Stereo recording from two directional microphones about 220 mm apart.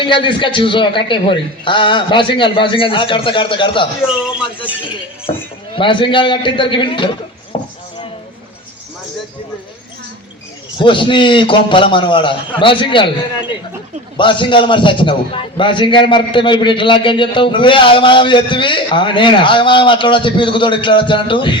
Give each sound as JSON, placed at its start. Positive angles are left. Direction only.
{"t": 0.0, "sound": "a man's voice", "side_deg": 20}
{"t": 4.0, "sound": "speech", "side_deg": -5}
{"t": 5.3, "sound": "a man's voice", "side_deg": 25}
{"t": 7.5, "sound": "a sound", "side_deg": 20}
{"t": 10.8, "sound": "a man's voice", "side_deg": 20}
{"t": 14.2, "sound": "a man's voice", "side_deg": 20}